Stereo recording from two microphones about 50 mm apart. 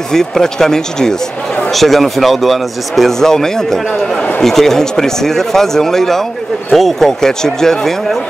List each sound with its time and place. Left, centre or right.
0.1 s speech: centre